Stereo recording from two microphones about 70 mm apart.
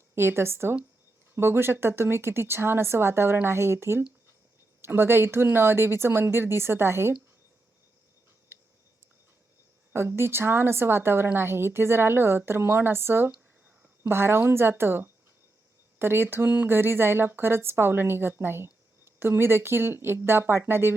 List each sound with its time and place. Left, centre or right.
0.2 s a woman's voice: right
9.9 s a woman's voice: right